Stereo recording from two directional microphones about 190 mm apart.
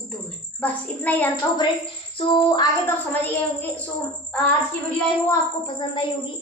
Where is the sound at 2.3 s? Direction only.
20° left (ahead or behind).